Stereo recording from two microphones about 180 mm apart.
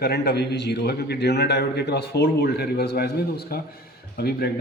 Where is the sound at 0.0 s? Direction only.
65° left (ahead or behind).